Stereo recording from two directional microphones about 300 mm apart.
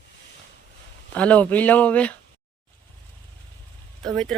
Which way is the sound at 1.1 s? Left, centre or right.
Centre.